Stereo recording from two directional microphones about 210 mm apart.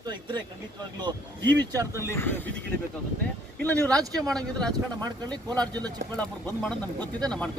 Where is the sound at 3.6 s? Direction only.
5° left (ahead or behind).